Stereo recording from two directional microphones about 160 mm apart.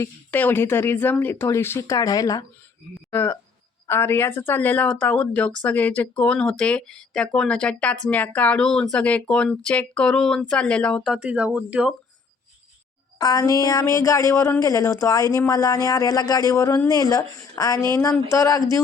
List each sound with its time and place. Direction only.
0.0 s speech: 10° left (ahead or behind); by 11.9 s 5° right (ahead or behind)
13.1 s speech: 20° left (ahead or behind)